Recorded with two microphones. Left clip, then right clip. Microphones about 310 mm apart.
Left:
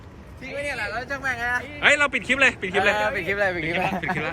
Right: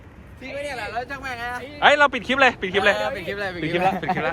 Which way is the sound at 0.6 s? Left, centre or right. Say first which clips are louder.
Left 1 dB; centre.